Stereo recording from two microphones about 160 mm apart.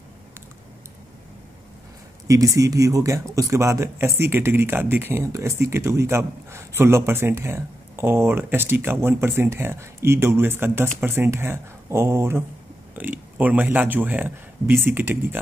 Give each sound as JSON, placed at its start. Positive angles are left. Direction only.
{"t": 2.2, "sound": "speech", "side_deg": -20}